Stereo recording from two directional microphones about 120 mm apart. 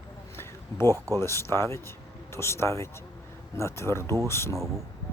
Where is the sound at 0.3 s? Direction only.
20° left (ahead or behind).